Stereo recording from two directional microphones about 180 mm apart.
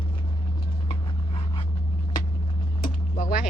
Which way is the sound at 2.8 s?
50° left (ahead or behind).